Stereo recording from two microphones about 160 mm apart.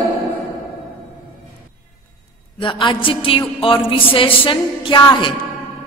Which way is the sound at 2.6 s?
30° left (ahead or behind).